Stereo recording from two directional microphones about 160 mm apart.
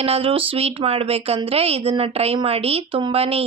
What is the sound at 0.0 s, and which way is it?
A woman's voice, 35° right (ahead or behind).